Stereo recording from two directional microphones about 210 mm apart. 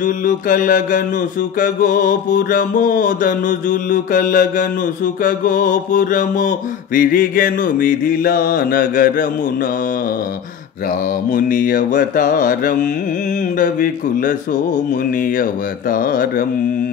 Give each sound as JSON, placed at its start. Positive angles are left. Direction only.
{"t": 0.0, "sound": "music", "side_deg": 40}
{"t": 11.3, "sound": "music", "side_deg": 40}
{"t": 15.9, "sound": "music", "side_deg": 40}